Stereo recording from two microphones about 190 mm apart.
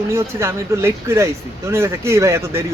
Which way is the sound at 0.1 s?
15° right (ahead or behind).